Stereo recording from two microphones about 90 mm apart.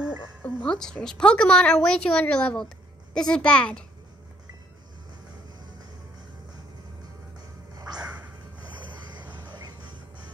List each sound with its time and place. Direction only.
0.4 s a woman's voice: 15° left (ahead or behind)
7.7 s music: 45° right (ahead or behind)
8.7 s a sound: 55° right (ahead or behind)